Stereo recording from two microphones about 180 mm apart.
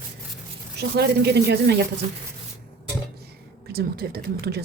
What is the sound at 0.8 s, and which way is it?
Speech, 65° right (ahead or behind).